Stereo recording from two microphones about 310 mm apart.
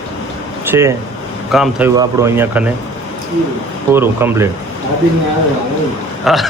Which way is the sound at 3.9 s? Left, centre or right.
Centre.